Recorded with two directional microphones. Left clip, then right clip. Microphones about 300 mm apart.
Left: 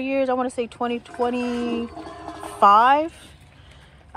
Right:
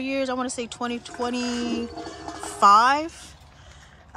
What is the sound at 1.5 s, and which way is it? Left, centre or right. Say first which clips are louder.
Speech: left 2 dB; centre.